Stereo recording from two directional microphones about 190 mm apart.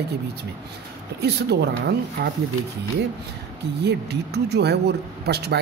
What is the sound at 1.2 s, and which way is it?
Speech, 60° right (ahead or behind).